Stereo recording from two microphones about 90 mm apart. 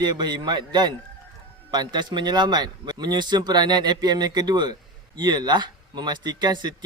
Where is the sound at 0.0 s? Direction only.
55° right (ahead or behind).